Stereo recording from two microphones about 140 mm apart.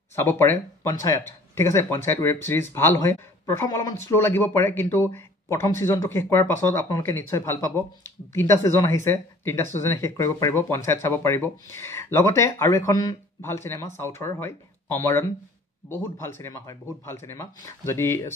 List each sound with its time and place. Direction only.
0.1 s speech: 15° left (ahead or behind)